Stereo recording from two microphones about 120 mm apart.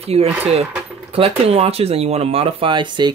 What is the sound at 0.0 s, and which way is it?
Speech, 60° right (ahead or behind).